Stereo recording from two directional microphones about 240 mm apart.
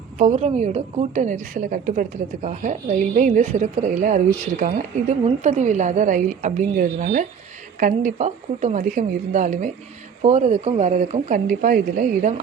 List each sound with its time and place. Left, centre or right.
0.2 s a woman's voice: right